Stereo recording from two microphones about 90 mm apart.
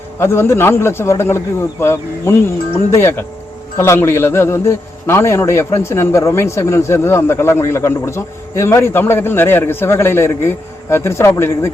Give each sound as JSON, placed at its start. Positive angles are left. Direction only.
{"t": 0.2, "sound": "a man's voice", "side_deg": 30}